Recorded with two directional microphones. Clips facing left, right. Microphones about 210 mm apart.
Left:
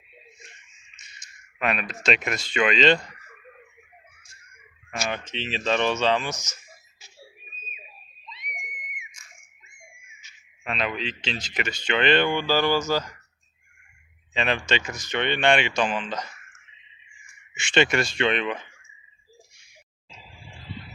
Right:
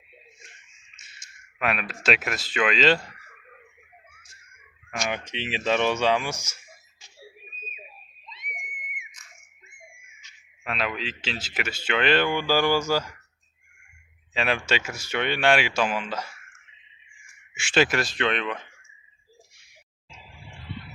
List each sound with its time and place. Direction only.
1.0 s a sound: 5° right (ahead or behind)
1.5 s speech: 5° right (ahead or behind)
5.0 s speech: 15° right (ahead or behind)
10.6 s speech: 5° right (ahead or behind)
14.3 s speech: 5° right (ahead or behind)
17.5 s speech: 5° right (ahead or behind)
20.4 s a sound: 55° right (ahead or behind)